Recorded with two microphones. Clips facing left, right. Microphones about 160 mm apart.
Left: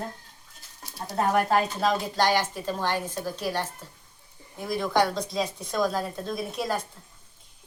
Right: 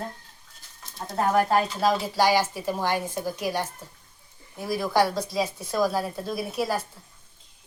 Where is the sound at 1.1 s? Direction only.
Centre (ahead or behind).